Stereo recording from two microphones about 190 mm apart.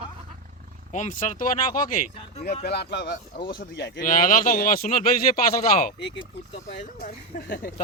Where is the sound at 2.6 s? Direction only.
60° left (ahead or behind).